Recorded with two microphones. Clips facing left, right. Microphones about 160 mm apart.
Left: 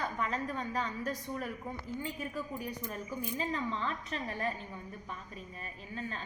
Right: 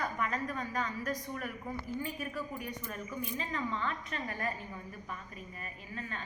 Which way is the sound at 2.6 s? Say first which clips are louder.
Left 2 dB; 30° left (ahead or behind).